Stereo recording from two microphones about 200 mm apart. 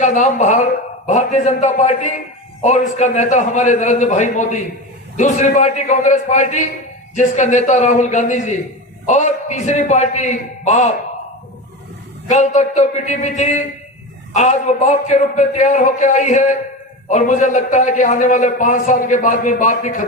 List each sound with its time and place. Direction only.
0.0 s a man's voice: 40° left (ahead or behind)
12.3 s a man's voice: 35° left (ahead or behind)